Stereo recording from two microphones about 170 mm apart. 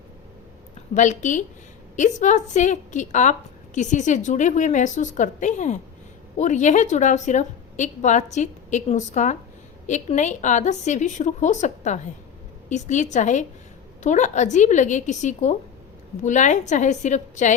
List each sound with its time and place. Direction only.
0.9 s a woman's voice: 45° left (ahead or behind)